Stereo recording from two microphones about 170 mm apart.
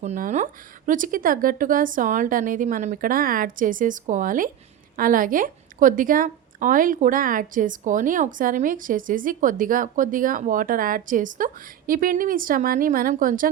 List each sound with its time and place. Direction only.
0.0 s a woman's voice: 45° right (ahead or behind)